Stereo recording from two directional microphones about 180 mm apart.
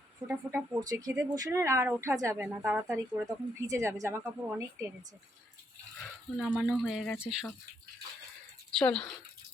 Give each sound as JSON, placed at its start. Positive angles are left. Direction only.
{"t": 0.3, "sound": "a woman's voice", "side_deg": -15}
{"t": 6.0, "sound": "speech", "side_deg": 0}
{"t": 8.7, "sound": "speech", "side_deg": 5}